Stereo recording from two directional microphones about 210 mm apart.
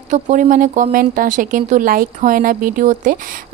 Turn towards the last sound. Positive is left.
turn(degrees=-40)  # may be behind; listen again after turning